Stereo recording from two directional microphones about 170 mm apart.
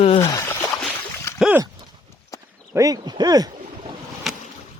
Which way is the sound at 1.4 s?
5° right (ahead or behind).